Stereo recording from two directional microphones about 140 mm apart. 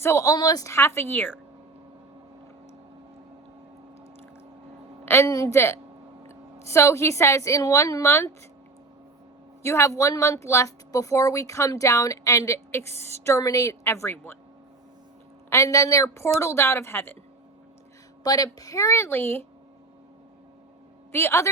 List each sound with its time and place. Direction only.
0.0 s speech: 20° left (ahead or behind)
5.0 s a woman's voice: 20° left (ahead or behind)
9.6 s speech: 20° left (ahead or behind)
15.4 s speech: 20° left (ahead or behind)
18.2 s speech: 25° left (ahead or behind)
21.1 s a woman's voice: 20° left (ahead or behind)